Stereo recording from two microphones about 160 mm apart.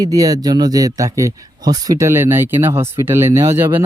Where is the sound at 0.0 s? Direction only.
20° right (ahead or behind).